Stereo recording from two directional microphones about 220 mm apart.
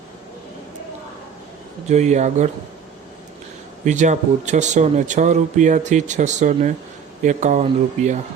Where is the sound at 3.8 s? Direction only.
35° right (ahead or behind).